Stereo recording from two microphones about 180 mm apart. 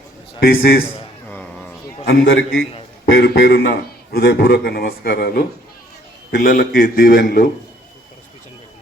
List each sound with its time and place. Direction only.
0.3 s a man's voice: 60° left (ahead or behind)
1.3 s a sound: 10° left (ahead or behind)
2.0 s a man's voice: 65° left (ahead or behind)